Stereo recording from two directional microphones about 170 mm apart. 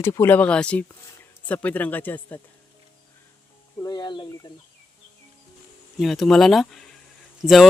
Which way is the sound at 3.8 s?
25° left (ahead or behind).